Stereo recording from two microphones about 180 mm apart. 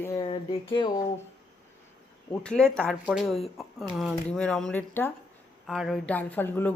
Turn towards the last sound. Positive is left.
turn(degrees=10)  # may be behind; listen again after turning